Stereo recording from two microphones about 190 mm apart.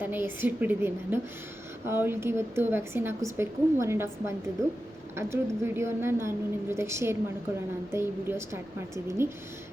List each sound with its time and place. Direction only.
0.0 s a woman's voice: 10° right (ahead or behind)